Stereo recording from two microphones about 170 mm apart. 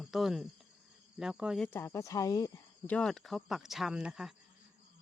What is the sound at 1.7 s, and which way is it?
Speech, 15° left (ahead or behind).